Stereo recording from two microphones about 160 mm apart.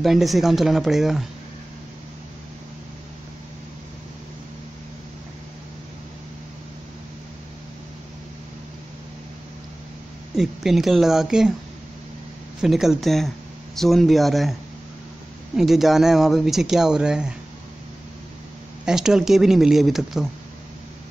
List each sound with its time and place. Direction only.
0.0 s speech: centre (ahead or behind)
10.3 s speech: centre (ahead or behind)
12.6 s speech: centre (ahead or behind)
15.5 s speech: centre (ahead or behind)
18.9 s speech: 5° right (ahead or behind)